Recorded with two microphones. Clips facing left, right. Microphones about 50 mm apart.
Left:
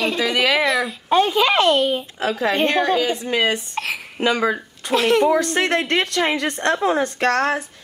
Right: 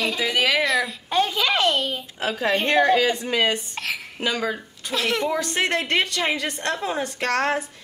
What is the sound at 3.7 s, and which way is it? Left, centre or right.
A child's voice, left.